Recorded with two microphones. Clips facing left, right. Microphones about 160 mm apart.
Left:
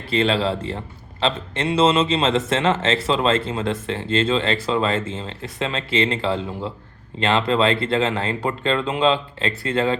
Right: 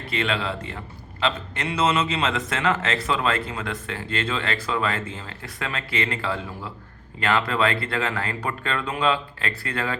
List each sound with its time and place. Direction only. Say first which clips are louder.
0.1 s a man's voice: left 7 dB; 30° left (ahead or behind)